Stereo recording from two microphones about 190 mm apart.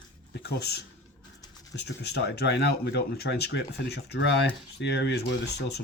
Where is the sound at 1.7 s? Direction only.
65° left (ahead or behind).